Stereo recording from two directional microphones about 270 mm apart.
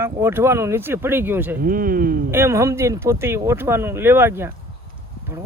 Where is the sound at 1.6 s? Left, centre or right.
Right.